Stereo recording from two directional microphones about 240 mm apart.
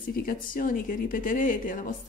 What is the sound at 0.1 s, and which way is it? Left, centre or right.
Speech, left.